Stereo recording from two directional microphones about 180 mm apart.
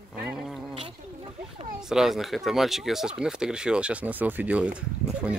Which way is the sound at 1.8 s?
5° right (ahead or behind).